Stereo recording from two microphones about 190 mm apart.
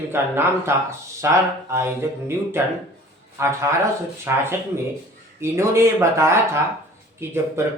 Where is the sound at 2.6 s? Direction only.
15° right (ahead or behind).